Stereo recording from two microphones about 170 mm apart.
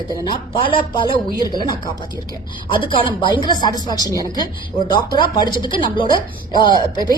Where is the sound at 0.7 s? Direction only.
30° left (ahead or behind).